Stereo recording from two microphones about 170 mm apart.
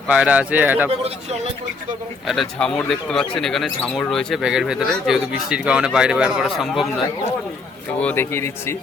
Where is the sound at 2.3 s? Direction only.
Centre (ahead or behind).